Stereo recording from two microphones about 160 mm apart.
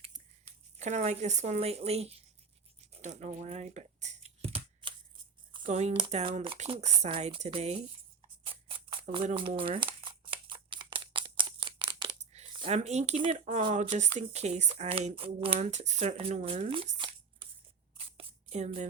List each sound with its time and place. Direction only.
0.0 s speech: 45° right (ahead or behind)
2.9 s computer keyboard: 45° right (ahead or behind)
5.6 s speech: 45° right (ahead or behind)
6.6 s speech: 45° right (ahead or behind)
8.4 s a sound: 35° right (ahead or behind)
12.2 s a sound: 45° right (ahead or behind)
12.7 s speech: 45° right (ahead or behind)
13.7 s speech: 45° right (ahead or behind)
15.5 s speech: 45° right (ahead or behind)
18.0 s a sound: 35° right (ahead or behind)